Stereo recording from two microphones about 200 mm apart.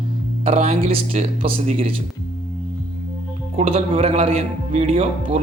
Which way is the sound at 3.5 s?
30° right (ahead or behind).